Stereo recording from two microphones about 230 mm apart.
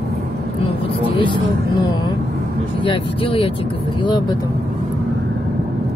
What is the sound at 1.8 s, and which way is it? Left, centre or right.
A woman's voice, centre.